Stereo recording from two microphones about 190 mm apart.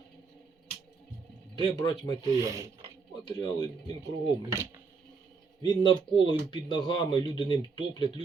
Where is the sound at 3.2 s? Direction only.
25° left (ahead or behind).